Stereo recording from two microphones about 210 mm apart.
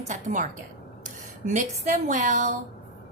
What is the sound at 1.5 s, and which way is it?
A woman's voice, 35° right (ahead or behind).